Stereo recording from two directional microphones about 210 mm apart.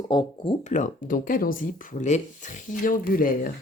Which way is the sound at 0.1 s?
20° left (ahead or behind).